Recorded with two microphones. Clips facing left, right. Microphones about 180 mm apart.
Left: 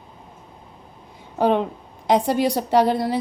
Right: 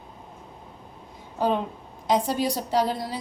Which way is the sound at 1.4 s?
70° left (ahead or behind).